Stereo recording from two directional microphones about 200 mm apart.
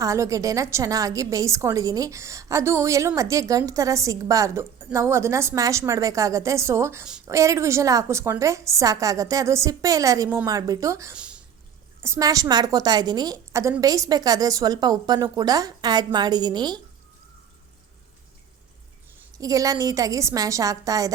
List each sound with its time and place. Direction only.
0.0 s a woman's voice: 15° right (ahead or behind)
19.4 s a woman's voice: 15° right (ahead or behind)